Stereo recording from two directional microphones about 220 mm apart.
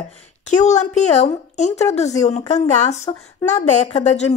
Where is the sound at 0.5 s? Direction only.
30° left (ahead or behind).